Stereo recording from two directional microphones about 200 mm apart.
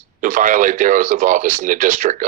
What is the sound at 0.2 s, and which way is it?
Speech, 40° right (ahead or behind).